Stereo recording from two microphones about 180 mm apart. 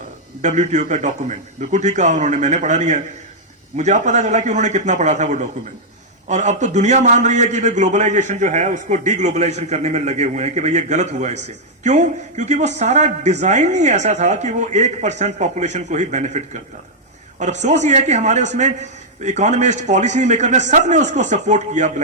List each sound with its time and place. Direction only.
0.4 s a man's voice: 40° right (ahead or behind)